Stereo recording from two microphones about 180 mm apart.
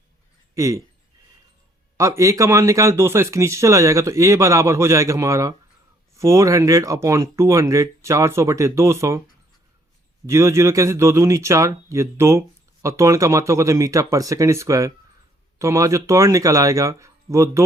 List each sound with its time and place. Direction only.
0.5 s speech: 15° right (ahead or behind)
2.0 s speech: 15° right (ahead or behind)
10.2 s speech: 15° right (ahead or behind)